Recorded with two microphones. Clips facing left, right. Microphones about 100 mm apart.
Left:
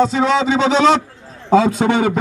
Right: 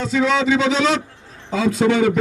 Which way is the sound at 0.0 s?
35° left (ahead or behind).